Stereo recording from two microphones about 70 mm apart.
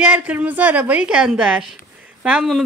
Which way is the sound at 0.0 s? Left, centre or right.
Right.